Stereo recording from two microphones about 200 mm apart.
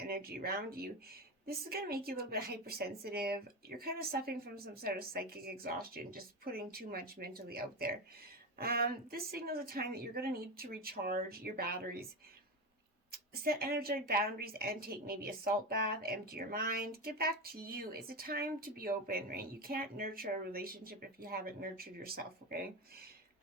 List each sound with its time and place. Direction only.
0.0 s a woman's voice: 50° right (ahead or behind)
13.1 s a woman's voice: 50° right (ahead or behind)